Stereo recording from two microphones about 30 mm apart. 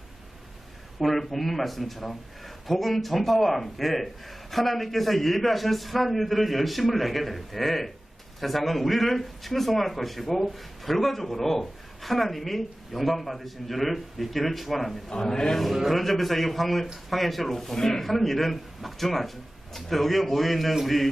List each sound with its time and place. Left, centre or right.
1.0 s speech: centre
15.1 s a man's voice: left
15.9 s speech: centre